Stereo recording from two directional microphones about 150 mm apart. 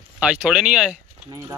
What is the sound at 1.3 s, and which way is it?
Speech, 20° right (ahead or behind).